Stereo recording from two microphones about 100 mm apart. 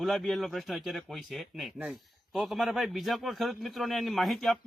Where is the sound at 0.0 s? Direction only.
Centre (ahead or behind).